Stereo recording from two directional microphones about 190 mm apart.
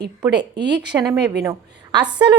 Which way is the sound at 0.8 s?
20° right (ahead or behind).